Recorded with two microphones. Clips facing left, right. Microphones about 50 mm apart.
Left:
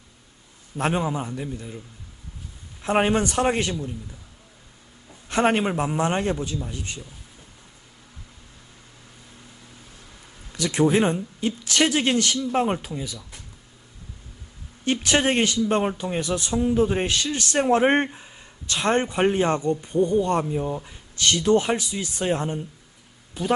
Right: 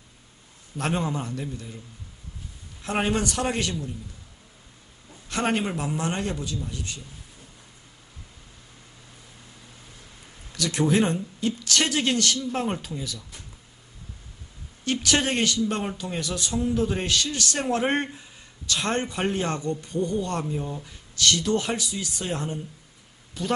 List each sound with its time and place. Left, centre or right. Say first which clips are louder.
0.8 s a man's voice: left 3 dB; centre
2.8 s speech: left 4 dB; left
5.3 s speech: left 5 dB; left
10.5 s speech: left 3 dB; left
14.8 s speech: left 3 dB; left
23.3 s speech: left 4 dB; centre